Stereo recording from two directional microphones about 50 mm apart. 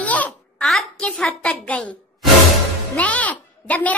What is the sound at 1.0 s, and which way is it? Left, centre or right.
Speech, centre.